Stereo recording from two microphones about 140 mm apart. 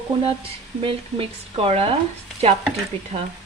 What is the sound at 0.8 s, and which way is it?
Speech, 40° right (ahead or behind).